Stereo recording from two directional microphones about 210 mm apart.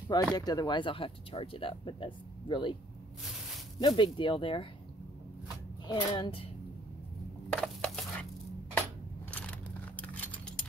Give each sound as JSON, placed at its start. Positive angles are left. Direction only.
{"t": 0.4, "sound": "speech", "side_deg": 20}
{"t": 3.8, "sound": "speech", "side_deg": 20}
{"t": 5.9, "sound": "speech", "side_deg": 20}
{"t": 7.4, "sound": "a sound", "side_deg": 5}
{"t": 9.3, "sound": "keys jangling", "side_deg": 5}